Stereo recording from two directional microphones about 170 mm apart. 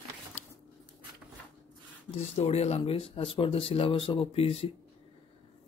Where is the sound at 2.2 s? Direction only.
35° left (ahead or behind).